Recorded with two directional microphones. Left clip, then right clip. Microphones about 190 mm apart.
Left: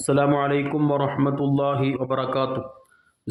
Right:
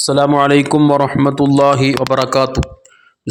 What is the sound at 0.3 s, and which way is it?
Speech, 50° right (ahead or behind).